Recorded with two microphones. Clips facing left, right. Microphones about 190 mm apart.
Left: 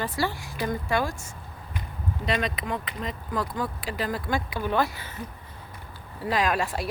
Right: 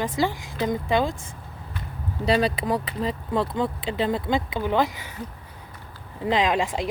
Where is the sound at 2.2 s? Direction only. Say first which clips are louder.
Right 7 dB; 30° right (ahead or behind); by 5.2 s 15° right (ahead or behind).